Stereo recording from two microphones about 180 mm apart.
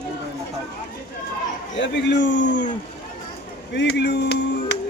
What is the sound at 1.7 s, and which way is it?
Speech, 80° left.